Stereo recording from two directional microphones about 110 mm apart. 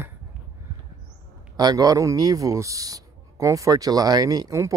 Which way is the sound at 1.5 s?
35° right (ahead or behind).